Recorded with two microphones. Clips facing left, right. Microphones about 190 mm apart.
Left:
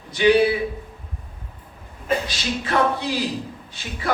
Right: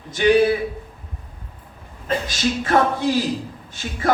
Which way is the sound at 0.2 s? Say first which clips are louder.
Even; 50° right (ahead or behind).